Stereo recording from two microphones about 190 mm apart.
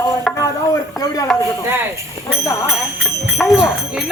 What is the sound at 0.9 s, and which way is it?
Speech, 20° left (ahead or behind).